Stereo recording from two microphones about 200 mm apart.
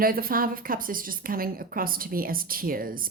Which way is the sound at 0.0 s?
45° right (ahead or behind).